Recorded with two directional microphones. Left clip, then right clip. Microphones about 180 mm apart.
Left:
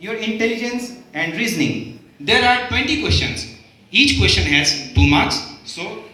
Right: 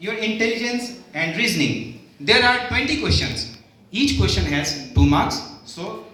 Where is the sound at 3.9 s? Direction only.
25° right (ahead or behind).